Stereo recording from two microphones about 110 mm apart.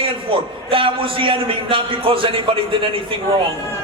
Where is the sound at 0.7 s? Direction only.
55° right (ahead or behind).